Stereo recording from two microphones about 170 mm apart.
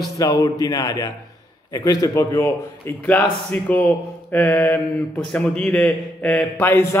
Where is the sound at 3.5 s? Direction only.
10° left (ahead or behind).